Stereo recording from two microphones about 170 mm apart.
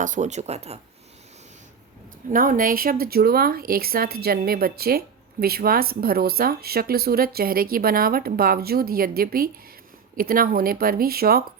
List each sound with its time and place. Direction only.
0.0 s speech: 45° right (ahead or behind)
2.3 s speech: 55° right (ahead or behind)